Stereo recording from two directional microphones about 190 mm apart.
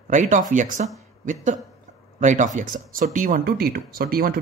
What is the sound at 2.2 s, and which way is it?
Speech, 40° right (ahead or behind).